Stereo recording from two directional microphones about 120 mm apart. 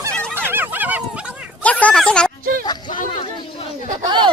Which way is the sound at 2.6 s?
35° left (ahead or behind).